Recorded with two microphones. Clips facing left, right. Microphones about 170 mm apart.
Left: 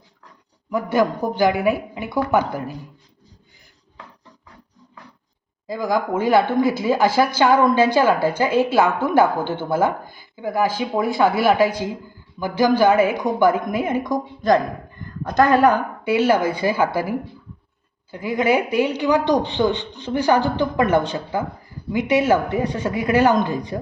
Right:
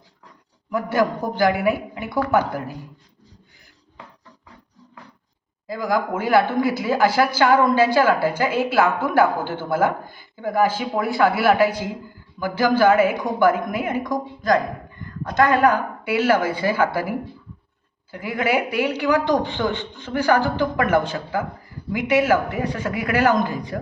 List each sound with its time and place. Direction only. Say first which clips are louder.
0.7 s a woman's voice: left 1 dB; 15° left (ahead or behind)
5.6 s a woman's voice: left 1 dB; 20° left (ahead or behind)